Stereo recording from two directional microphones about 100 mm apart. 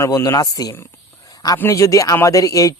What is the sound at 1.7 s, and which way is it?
Speech, 35° left (ahead or behind).